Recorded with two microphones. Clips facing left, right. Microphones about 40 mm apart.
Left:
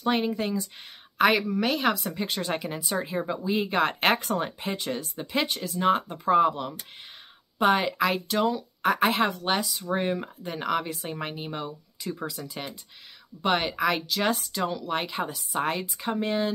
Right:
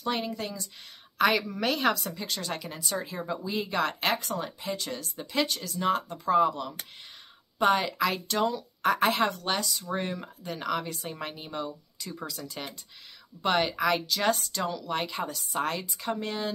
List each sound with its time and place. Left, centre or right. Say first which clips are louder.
0.0 s speech: left 5 dB; left
1.1 s speech: left 3 dB; centre
2.1 s speech: left 5 dB; left
7.5 s speech: left 2 dB; centre